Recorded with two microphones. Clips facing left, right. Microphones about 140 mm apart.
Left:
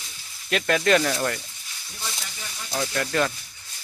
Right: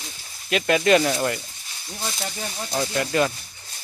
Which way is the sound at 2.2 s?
50° right (ahead or behind).